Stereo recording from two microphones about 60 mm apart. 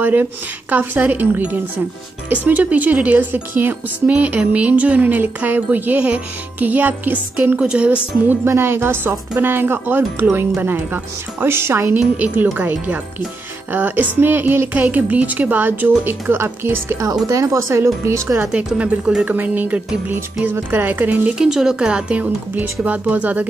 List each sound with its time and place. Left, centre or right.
0.0 s speech: right
7.5 s speech: centre
8.5 s speech: right
11.4 s speech: right
12.5 s speech: right
17.0 s speech: right
18.8 s speech: centre
19.2 s speech: right
20.1 s speech: right
21.4 s speech: centre; by 23.4 s right